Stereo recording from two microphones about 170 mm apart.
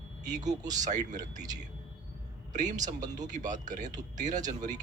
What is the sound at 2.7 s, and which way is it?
Speech, 20° right (ahead or behind).